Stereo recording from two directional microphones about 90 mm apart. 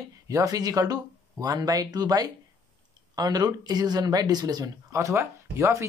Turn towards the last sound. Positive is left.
turn(degrees=-30)  # may be behind; listen again after turning